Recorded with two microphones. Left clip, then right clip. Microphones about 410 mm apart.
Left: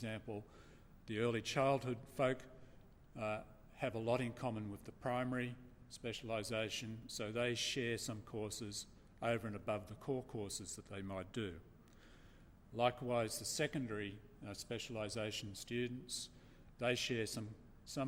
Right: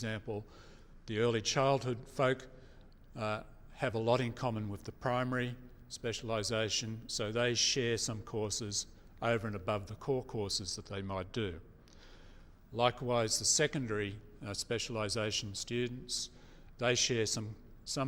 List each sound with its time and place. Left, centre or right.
0.0 s a man's voice: right
12.7 s a man's voice: right